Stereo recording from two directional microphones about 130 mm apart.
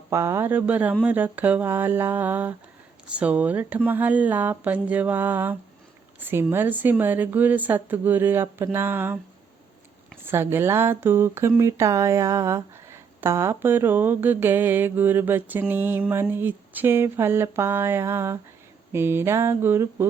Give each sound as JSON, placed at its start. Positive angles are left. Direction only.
{"t": 0.1, "sound": "speech", "side_deg": -20}
{"t": 10.2, "sound": "speech", "side_deg": -15}
{"t": 18.9, "sound": "a sound", "side_deg": -20}